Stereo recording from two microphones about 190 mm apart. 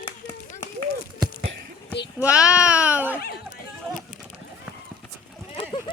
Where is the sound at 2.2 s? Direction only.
5° right (ahead or behind).